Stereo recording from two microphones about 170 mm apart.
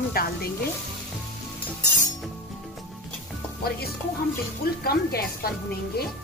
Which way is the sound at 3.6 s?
65° left (ahead or behind).